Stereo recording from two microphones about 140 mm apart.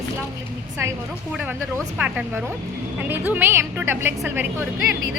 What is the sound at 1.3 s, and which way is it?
A woman's voice, 10° right (ahead or behind).